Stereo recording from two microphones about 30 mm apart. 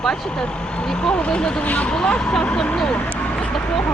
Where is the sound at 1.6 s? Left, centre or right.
Left.